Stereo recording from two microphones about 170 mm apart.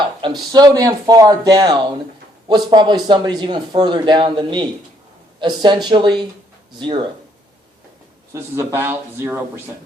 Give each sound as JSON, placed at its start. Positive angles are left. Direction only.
{"t": 0.0, "sound": "speech", "side_deg": -25}
{"t": 8.3, "sound": "a man's voice", "side_deg": -15}